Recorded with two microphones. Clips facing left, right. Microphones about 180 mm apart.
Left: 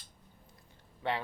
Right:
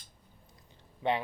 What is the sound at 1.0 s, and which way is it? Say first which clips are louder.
Speech: right 4 dB; 20° right (ahead or behind).